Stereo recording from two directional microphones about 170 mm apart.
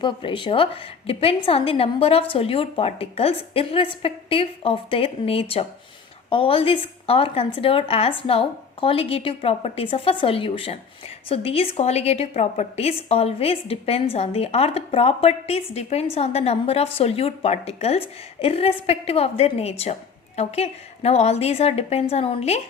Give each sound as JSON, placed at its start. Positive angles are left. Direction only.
{"t": 0.0, "sound": "a woman's voice", "side_deg": 30}